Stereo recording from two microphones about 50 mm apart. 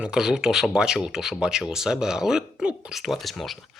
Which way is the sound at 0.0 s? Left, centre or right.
Centre.